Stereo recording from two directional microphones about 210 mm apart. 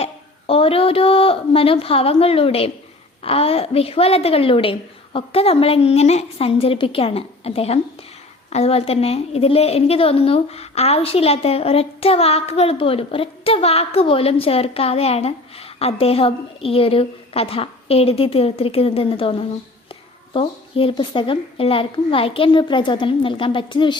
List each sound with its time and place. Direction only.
0.0 s a woman's voice: 25° left (ahead or behind)